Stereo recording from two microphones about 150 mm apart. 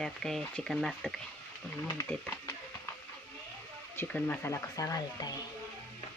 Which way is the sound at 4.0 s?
10° left (ahead or behind).